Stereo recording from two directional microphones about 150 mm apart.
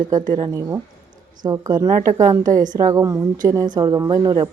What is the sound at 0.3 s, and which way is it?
Speech, 25° right (ahead or behind).